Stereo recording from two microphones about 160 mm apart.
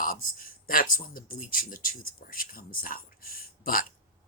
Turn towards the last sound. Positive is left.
turn(degrees=65)  # may be behind; listen again after turning